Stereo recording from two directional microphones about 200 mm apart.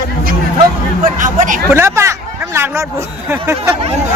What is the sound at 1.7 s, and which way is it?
Speech, 15° right (ahead or behind).